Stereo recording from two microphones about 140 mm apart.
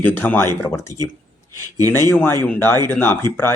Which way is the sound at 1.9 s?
15° left (ahead or behind).